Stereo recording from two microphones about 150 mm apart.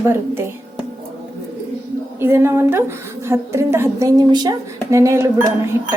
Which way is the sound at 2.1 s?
15° right (ahead or behind).